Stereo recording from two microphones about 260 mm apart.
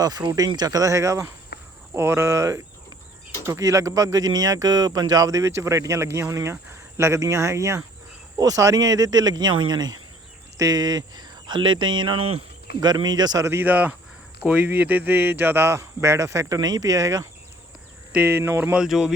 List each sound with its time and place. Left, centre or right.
0.0 s speech: centre
1.5 s cricket: left
1.9 s speech: centre